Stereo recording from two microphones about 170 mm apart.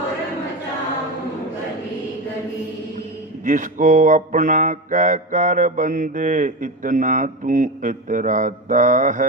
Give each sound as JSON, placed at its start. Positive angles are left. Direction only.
{"t": 3.4, "sound": "mantra", "side_deg": -50}